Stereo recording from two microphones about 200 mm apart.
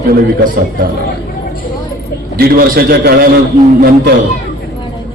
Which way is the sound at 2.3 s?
50° right (ahead or behind).